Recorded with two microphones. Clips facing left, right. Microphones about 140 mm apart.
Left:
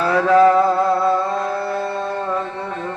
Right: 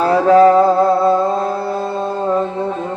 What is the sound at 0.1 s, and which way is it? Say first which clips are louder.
Music: right 3 dB; 30° right (ahead or behind).